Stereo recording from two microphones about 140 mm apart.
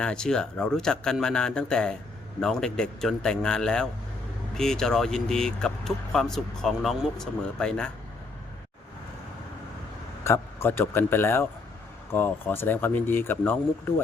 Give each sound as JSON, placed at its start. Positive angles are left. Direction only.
{"t": 0.0, "sound": "speech", "side_deg": 5}
{"t": 10.2, "sound": "speech", "side_deg": 20}